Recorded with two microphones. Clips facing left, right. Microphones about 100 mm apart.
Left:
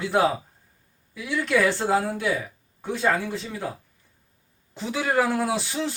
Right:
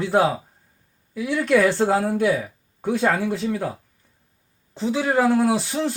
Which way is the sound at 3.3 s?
45° right (ahead or behind).